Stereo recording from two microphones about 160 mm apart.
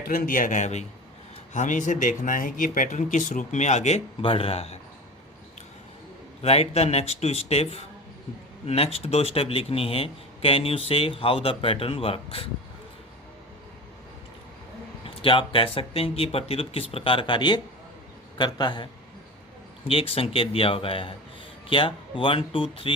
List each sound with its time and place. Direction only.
0.1 s speech: 60° left (ahead or behind); by 4.8 s 40° left (ahead or behind)
6.4 s speech: 40° left (ahead or behind)
15.0 s a man's voice: 35° left (ahead or behind)
19.9 s speech: 35° left (ahead or behind)